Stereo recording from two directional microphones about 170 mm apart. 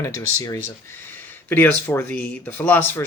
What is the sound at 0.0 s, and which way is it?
Speech, 20° left (ahead or behind).